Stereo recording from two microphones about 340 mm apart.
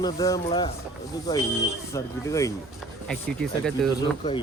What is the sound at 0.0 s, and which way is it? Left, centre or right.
Speech, centre.